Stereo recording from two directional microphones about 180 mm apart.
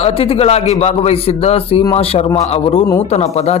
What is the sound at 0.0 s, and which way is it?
A man's voice, 30° left (ahead or behind).